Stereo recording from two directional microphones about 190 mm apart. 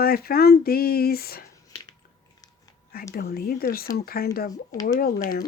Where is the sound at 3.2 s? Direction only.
50° left (ahead or behind).